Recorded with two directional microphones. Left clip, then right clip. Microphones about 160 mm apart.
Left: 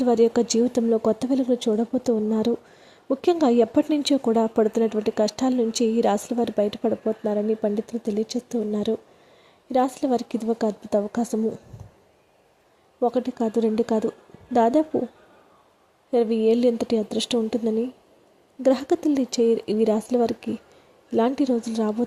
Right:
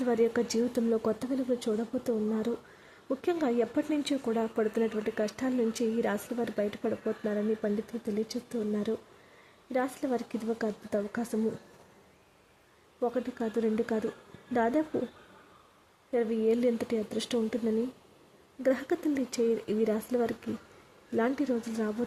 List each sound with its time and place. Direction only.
0.0 s speech: 20° left (ahead or behind)
13.0 s speech: 25° left (ahead or behind)
16.1 s speech: 30° left (ahead or behind)
18.6 s speech: 25° left (ahead or behind)